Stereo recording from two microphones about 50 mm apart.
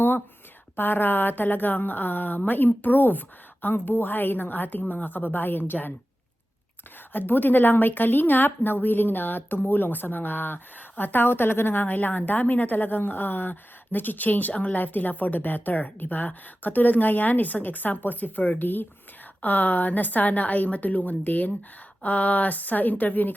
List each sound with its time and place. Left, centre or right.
0.8 s a woman's voice: left
7.1 s a woman's voice: left